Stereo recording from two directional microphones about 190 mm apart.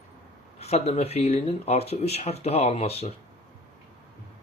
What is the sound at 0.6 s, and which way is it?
Speech, 35° left (ahead or behind).